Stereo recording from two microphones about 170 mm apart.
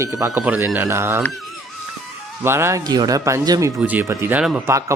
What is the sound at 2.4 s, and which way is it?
Speech, 15° right (ahead or behind).